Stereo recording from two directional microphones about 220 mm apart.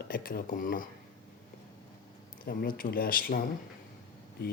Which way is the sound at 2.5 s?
40° left (ahead or behind).